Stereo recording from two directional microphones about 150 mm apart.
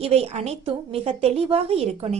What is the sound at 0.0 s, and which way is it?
A woman's voice, 45° right (ahead or behind).